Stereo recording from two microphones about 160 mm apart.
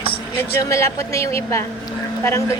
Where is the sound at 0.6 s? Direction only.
20° left (ahead or behind).